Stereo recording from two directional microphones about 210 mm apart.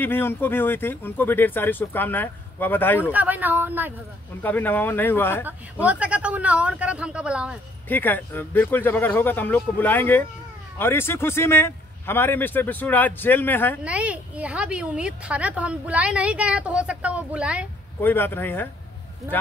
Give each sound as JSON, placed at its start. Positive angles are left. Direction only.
{"t": 0.0, "sound": "speech", "side_deg": 10}
{"t": 3.1, "sound": "speech", "side_deg": -10}
{"t": 4.4, "sound": "speech", "side_deg": 10}
{"t": 5.4, "sound": "a woman's voice", "side_deg": -5}
{"t": 7.9, "sound": "speech", "side_deg": 10}
{"t": 13.8, "sound": "a woman's voice", "side_deg": -5}
{"t": 18.0, "sound": "speech", "side_deg": 10}